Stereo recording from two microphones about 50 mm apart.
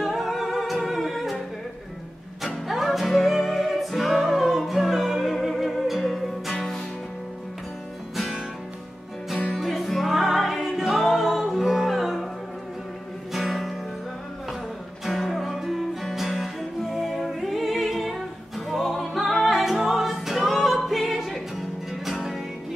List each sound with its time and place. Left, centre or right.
0.0 s music: centre
2.4 s music: centre
9.5 s music: centre
13.3 s music: centre
15.0 s music: centre